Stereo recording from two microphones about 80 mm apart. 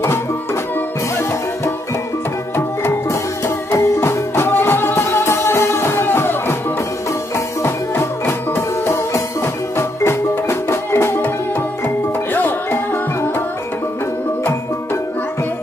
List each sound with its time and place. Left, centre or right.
3.1 s music: left
12.4 s music: left